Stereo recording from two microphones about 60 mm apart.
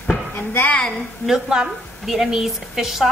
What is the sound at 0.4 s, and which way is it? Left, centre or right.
Speech, left.